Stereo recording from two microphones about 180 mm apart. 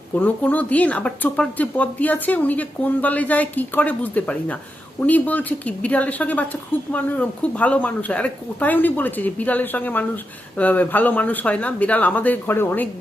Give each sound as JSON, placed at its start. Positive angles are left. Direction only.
{"t": 0.2, "sound": "speech", "side_deg": 10}